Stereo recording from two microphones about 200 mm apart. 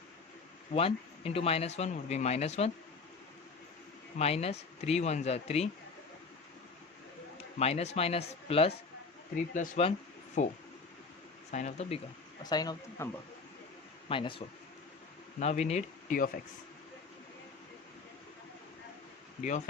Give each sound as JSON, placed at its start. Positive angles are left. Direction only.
{"t": 0.7, "sound": "speech", "side_deg": 30}
{"t": 4.2, "sound": "speech", "side_deg": 30}
{"t": 7.6, "sound": "speech", "side_deg": 30}
{"t": 9.3, "sound": "speech", "side_deg": 40}
{"t": 11.5, "sound": "speech", "side_deg": 35}
{"t": 12.4, "sound": "a man's voice", "side_deg": 20}
{"t": 14.1, "sound": "a man's voice", "side_deg": 25}
{"t": 19.4, "sound": "speech", "side_deg": 35}